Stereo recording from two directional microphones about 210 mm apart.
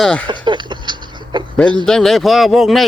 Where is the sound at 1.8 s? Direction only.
Centre (ahead or behind).